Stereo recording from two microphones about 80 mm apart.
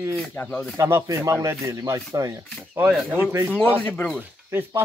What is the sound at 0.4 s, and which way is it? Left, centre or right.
Speech, centre.